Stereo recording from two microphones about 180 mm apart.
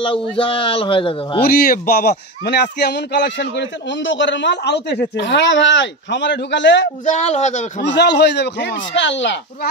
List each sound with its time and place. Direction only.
0.0 s a man's voice: 30° left (ahead or behind)
1.4 s a man's voice: 60° left (ahead or behind); by 6.9 s 80° left
7.1 s a man's voice: 40° left (ahead or behind)
7.8 s a man's voice: 75° left (ahead or behind)